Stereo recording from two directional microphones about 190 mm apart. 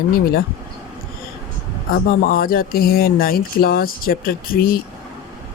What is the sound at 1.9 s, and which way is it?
Speech, 45° left (ahead or behind).